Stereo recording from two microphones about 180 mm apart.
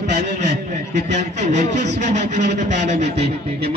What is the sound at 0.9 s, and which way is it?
A man's voice, 40° right (ahead or behind).